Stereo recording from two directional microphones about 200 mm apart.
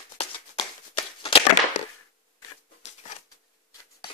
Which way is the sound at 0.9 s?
25° left (ahead or behind).